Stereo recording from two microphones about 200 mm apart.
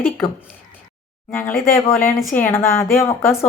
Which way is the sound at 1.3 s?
10° left (ahead or behind).